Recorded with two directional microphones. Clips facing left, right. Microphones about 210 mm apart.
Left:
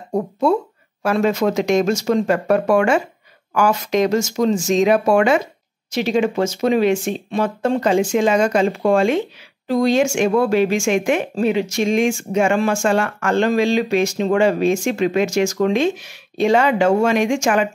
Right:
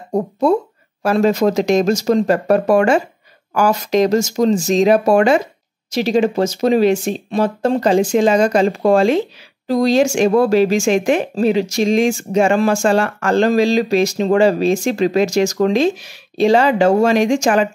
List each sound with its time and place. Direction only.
0.1 s speech: 40° right (ahead or behind)